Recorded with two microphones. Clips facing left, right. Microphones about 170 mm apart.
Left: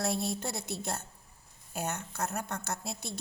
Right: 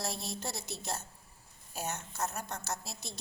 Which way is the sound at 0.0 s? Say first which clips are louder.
Left 6 dB; 55° left (ahead or behind).